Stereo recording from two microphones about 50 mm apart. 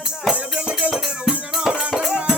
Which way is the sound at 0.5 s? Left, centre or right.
Right.